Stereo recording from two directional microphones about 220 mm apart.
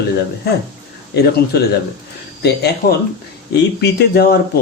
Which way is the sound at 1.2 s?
45° left (ahead or behind).